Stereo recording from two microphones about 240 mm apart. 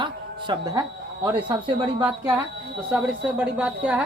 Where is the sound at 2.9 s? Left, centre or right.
Centre.